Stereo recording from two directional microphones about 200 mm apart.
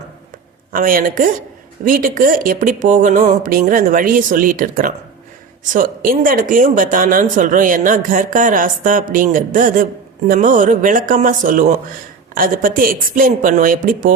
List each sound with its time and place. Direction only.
0.7 s speech: 45° right (ahead or behind)